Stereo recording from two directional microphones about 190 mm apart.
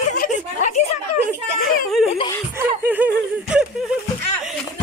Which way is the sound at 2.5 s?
10° right (ahead or behind).